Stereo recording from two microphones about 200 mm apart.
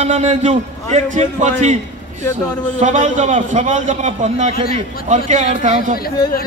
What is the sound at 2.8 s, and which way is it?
A man's voice, 35° right (ahead or behind).